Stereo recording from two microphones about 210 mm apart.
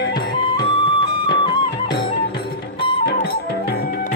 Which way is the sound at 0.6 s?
20° left (ahead or behind).